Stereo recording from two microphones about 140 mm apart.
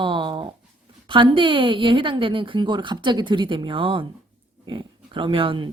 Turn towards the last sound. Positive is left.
turn(degrees=-40)  # may be behind; listen again after turning